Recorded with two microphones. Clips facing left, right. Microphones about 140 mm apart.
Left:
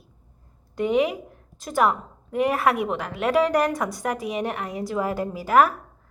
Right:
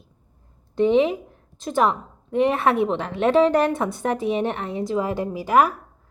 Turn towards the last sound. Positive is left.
turn(degrees=-20)  # may be behind; listen again after turning